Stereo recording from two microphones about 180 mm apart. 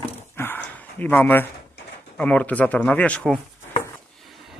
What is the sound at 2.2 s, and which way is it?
Speech, 5° left (ahead or behind).